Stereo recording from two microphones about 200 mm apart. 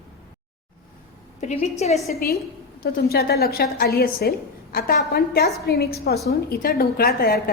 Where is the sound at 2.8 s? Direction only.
50° left (ahead or behind).